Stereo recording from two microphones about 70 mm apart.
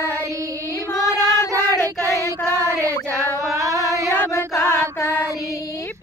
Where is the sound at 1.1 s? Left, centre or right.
Left.